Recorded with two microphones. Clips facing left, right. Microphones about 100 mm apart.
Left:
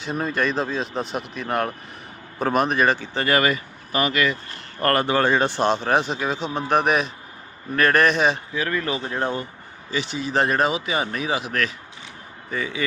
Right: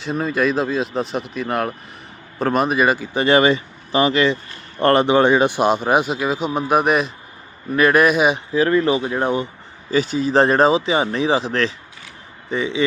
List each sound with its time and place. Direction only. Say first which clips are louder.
0.0 s speech: right 4 dB; centre (ahead or behind)
3.2 s speech: right 6 dB; 25° right (ahead or behind); by 8.4 s 10° right (ahead or behind)
8.5 s speech: right 9 dB; 30° right (ahead or behind)
9.0 s speech: right 5 dB; 10° right (ahead or behind)
9.9 s speech: right 7 dB; 40° right (ahead or behind); by 12.8 s 20° right (ahead or behind)